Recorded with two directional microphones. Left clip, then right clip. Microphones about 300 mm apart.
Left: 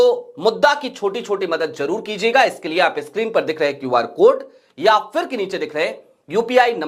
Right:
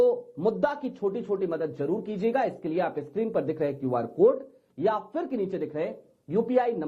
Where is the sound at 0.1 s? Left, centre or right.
Left.